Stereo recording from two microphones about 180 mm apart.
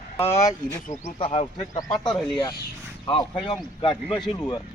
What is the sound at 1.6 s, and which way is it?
Speech, 20° left (ahead or behind).